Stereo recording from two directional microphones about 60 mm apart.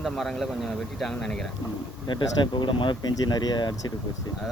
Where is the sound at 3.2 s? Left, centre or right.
Left.